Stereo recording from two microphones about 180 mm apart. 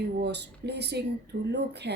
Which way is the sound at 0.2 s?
70° right (ahead or behind).